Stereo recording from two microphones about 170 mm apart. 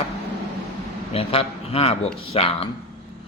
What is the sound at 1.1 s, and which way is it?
A man's voice, 35° left (ahead or behind).